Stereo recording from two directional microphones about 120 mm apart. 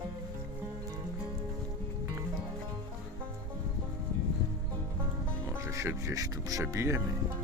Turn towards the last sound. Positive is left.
turn(degrees=-25)  # may be behind; listen again after turning